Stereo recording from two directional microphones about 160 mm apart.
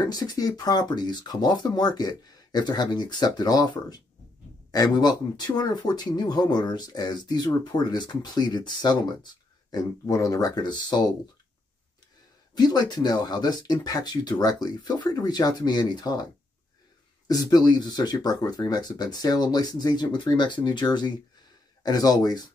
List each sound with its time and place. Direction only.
0.0 s speech: 25° left (ahead or behind)
12.5 s speech: 25° left (ahead or behind)
17.3 s speech: 25° left (ahead or behind)